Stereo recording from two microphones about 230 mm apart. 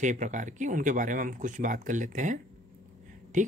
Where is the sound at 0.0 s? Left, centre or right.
Right.